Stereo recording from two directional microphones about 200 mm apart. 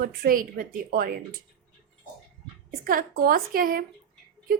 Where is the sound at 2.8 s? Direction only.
45° right (ahead or behind).